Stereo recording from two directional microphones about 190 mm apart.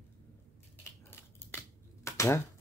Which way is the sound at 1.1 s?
10° left (ahead or behind).